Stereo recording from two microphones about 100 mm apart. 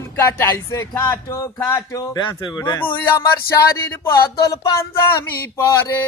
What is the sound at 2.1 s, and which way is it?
Speech, 45° left (ahead or behind).